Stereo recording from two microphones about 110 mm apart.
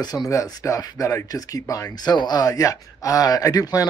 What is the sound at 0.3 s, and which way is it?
Speech, 30° left (ahead or behind).